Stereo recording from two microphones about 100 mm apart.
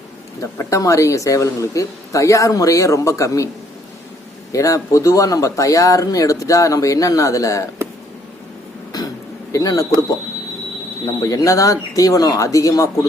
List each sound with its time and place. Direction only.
0.7 s speech: 30° left (ahead or behind)
4.5 s speech: 35° left (ahead or behind)
9.5 s speech: 35° left (ahead or behind)
11.0 s speech: 35° left (ahead or behind)